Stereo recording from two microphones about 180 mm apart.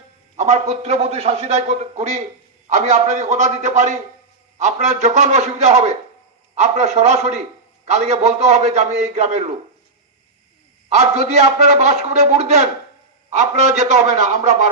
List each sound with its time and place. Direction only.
0.3 s a man's voice: 40° right (ahead or behind)
10.8 s a man's voice: 40° right (ahead or behind)